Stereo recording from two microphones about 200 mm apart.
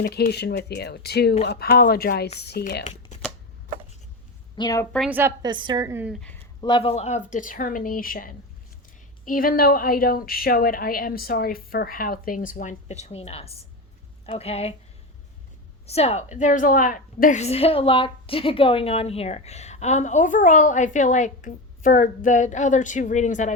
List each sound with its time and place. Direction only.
0.0 s a woman's voice: 55° left (ahead or behind)
4.5 s a woman's voice: 20° left (ahead or behind)
4.9 s a woman's voice: centre (ahead or behind)
5.1 s a woman's voice: 10° right (ahead or behind)
5.5 s a woman's voice: 20° right (ahead or behind)
6.1 s speech: 5° left (ahead or behind)
6.6 s a woman's voice: 25° left (ahead or behind)
15.9 s a woman's voice: 30° left (ahead or behind)